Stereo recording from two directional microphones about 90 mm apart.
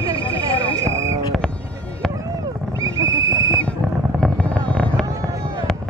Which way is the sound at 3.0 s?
35° right (ahead or behind).